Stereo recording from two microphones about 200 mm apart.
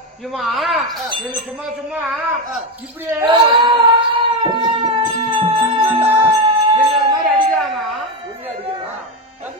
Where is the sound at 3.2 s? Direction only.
25° right (ahead or behind).